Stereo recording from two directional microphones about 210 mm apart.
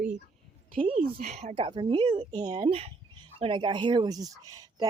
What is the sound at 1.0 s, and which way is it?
Speech, 35° right (ahead or behind).